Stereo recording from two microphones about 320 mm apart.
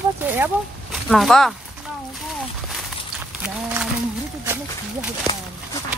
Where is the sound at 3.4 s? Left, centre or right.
Centre.